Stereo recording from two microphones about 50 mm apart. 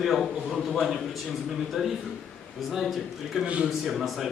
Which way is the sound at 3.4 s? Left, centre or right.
Right.